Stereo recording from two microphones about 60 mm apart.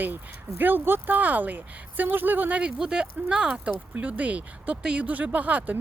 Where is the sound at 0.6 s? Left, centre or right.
Right.